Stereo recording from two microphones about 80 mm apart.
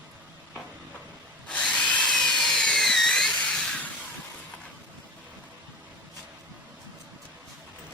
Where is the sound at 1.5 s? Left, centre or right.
Centre.